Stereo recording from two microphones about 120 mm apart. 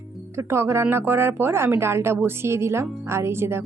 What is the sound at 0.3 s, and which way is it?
Speech, 25° right (ahead or behind).